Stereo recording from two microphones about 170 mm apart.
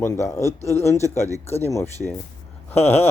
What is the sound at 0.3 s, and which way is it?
Speech, 15° left (ahead or behind).